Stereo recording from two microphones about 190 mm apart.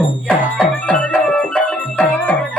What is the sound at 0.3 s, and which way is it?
Music, 5° left (ahead or behind).